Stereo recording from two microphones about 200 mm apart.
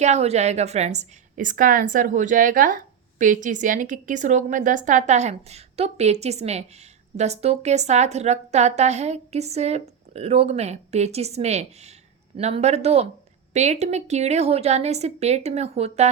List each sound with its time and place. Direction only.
0.0 s a woman's voice: 35° right (ahead or behind)